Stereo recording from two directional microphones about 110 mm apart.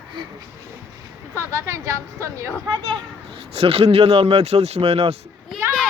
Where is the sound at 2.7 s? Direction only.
50° right (ahead or behind); by 5.1 s 65° right (ahead or behind).